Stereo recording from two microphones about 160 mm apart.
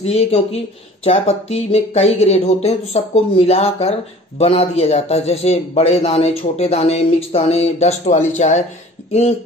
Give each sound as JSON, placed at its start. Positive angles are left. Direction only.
{"t": 0.0, "sound": "a man's voice", "side_deg": 40}